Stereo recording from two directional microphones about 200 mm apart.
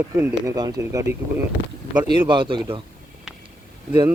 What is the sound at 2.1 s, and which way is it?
Speech, 25° right (ahead or behind).